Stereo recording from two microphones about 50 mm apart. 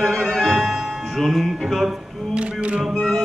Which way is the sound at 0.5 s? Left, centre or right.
Centre.